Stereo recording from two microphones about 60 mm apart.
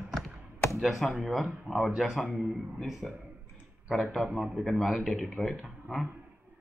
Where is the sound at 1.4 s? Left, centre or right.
Right.